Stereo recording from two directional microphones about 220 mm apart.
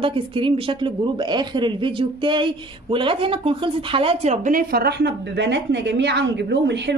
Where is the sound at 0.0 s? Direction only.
25° right (ahead or behind).